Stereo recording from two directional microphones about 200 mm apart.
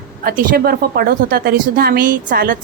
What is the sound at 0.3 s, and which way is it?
A woman's voice, 50° right (ahead or behind).